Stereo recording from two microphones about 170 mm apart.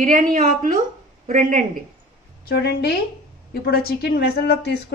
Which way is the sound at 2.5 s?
70° left (ahead or behind).